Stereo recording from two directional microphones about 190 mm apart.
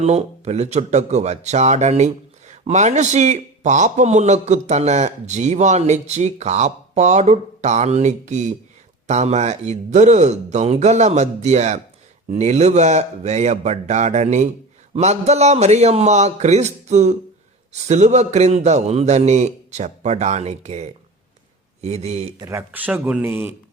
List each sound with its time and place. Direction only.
0.0 s speech: 35° right (ahead or behind)
22.4 s speech: 15° right (ahead or behind)